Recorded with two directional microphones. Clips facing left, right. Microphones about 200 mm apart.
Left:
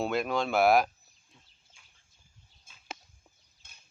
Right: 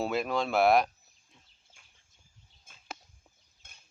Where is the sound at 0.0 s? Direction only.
Centre (ahead or behind).